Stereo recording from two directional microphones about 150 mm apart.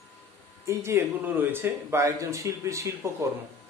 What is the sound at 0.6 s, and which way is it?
Speech, 20° right (ahead or behind).